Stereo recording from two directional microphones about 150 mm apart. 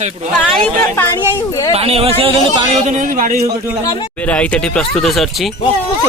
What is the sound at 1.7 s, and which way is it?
Speech, 40° right (ahead or behind).